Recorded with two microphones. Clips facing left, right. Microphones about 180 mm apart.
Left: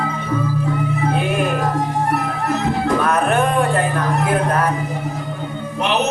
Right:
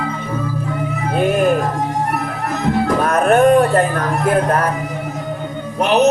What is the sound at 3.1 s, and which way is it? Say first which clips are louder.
Music: right 6 dB; 40° right (ahead or behind).